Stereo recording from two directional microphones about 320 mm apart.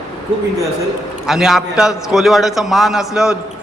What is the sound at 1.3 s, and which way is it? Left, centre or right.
A man's voice, centre.